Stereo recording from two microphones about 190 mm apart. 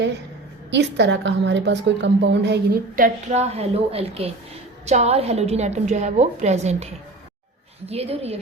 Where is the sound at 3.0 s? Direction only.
35° right (ahead or behind).